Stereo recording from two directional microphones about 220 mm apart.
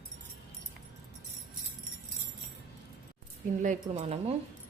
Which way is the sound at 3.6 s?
35° right (ahead or behind).